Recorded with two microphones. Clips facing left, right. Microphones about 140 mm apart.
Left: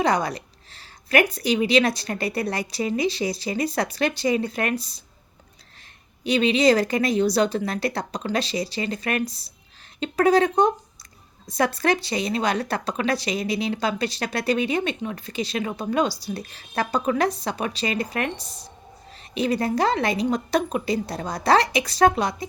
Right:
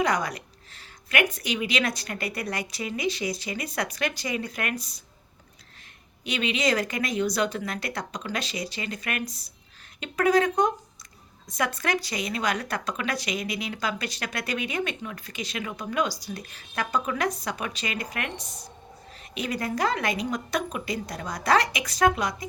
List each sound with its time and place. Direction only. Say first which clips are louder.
0.0 s speech: left 4 dB; 30° left (ahead or behind)
6.2 s speech: left 8 dB; 35° left (ahead or behind)